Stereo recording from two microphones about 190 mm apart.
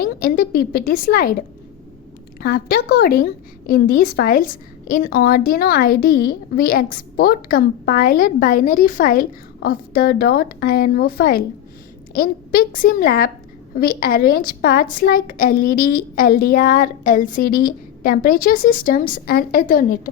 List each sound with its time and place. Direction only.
0.0 s a woman's voice: 50° left (ahead or behind)
2.4 s a woman's voice: 55° left (ahead or behind)